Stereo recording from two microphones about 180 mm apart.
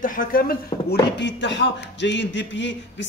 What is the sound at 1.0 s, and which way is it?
Speech, 80° left.